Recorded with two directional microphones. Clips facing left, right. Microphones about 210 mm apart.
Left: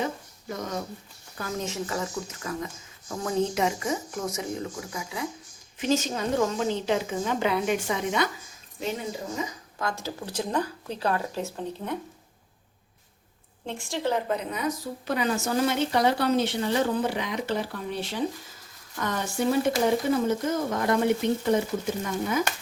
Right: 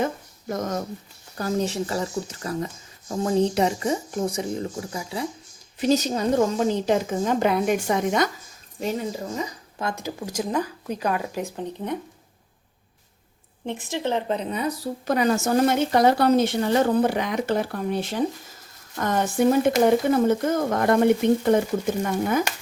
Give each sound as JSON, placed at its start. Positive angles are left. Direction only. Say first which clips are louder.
{"t": 0.0, "sound": "speech", "louder": "right 5 dB", "side_deg": -50}
{"t": 1.4, "sound": "a woman's voice", "louder": "right 7 dB", "side_deg": -35}
{"t": 9.7, "sound": "speech", "louder": "right 3 dB", "side_deg": -20}
{"t": 13.7, "sound": "speech", "louder": "right 2 dB", "side_deg": -20}
{"t": 15.0, "sound": "a woman's voice", "louder": "right 5 dB", "side_deg": -45}